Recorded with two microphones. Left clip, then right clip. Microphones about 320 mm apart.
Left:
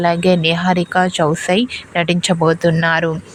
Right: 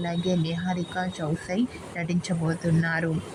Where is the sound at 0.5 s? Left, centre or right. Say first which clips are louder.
Left 15 dB; left.